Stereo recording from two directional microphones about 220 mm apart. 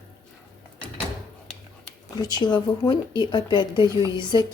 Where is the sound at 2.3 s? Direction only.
20° left (ahead or behind).